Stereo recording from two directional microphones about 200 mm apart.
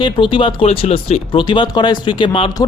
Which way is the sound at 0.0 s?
25° left (ahead or behind).